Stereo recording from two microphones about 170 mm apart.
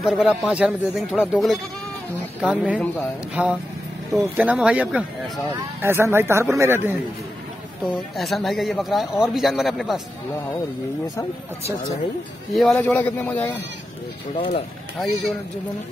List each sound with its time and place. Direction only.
0.0 s speech: 5° right (ahead or behind)
8.2 s speech: centre (ahead or behind)
12.5 s a man's voice: 5° left (ahead or behind)
14.3 s speech: 30° left (ahead or behind)